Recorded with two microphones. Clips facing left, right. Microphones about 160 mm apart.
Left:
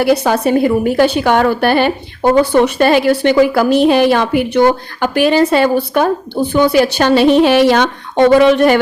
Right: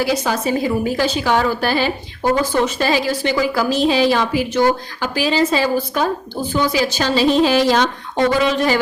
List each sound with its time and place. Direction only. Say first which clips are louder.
0.0 s a woman's voice: left 7 dB; 60° left (ahead or behind)